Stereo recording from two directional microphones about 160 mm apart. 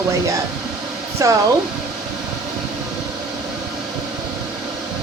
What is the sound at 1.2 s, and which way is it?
Speech, 20° right (ahead or behind).